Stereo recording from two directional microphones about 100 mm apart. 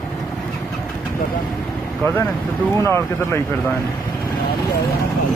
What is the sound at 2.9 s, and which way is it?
Speech, 25° left (ahead or behind).